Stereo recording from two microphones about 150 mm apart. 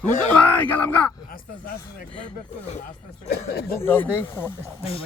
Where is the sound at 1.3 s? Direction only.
75° left (ahead or behind).